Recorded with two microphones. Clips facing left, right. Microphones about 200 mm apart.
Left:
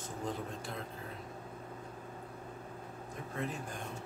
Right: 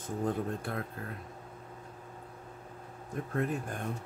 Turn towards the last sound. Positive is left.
turn(degrees=-55)  # may be behind; listen again after turning